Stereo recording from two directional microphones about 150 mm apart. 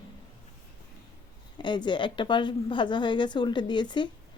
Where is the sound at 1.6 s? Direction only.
30° left (ahead or behind).